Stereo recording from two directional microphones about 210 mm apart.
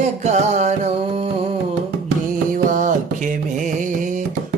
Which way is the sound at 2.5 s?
40° right (ahead or behind).